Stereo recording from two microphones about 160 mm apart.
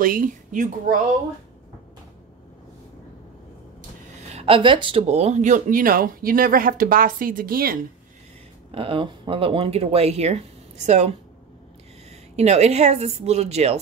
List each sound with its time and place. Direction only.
0.0 s speech: 60° right (ahead or behind)
4.3 s speech: 35° right (ahead or behind); by 7.8 s 65° right (ahead or behind)
8.7 s speech: 35° right (ahead or behind)
12.1 s speech: 45° right (ahead or behind)